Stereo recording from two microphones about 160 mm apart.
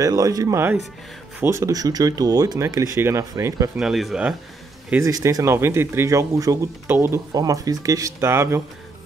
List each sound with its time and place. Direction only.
0.0 s speech: 20° right (ahead or behind)
3.7 s a man's voice: centre (ahead or behind)